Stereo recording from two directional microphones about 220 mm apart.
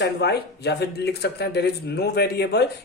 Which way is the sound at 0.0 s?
50° left (ahead or behind).